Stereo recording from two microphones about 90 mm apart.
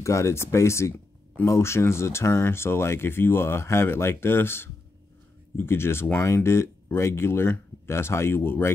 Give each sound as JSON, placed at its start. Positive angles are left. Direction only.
{"t": 0.0, "sound": "speech", "side_deg": 35}